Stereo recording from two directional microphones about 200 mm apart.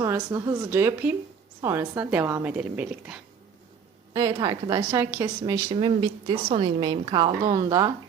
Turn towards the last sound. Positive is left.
turn(degrees=-20)  # may be behind; listen again after turning